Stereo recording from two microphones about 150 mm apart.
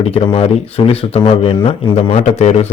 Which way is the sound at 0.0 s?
40° left (ahead or behind).